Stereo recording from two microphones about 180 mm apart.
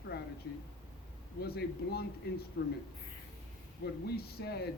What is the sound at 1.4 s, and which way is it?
Speech, 60° left (ahead or behind).